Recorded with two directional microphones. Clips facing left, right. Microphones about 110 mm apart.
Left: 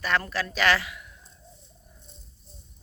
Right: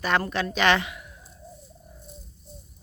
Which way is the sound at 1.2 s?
5° right (ahead or behind).